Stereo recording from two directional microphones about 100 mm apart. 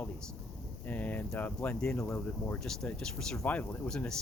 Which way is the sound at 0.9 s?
15° left (ahead or behind).